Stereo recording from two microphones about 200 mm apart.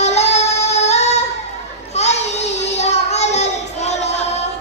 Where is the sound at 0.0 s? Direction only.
35° left (ahead or behind).